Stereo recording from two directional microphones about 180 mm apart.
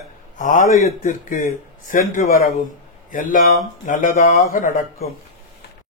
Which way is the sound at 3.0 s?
50° left (ahead or behind).